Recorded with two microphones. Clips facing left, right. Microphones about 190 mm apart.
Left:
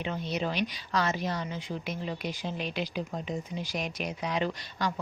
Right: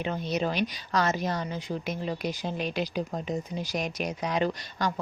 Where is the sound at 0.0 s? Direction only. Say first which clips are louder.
Right 3 dB; 40° right (ahead or behind).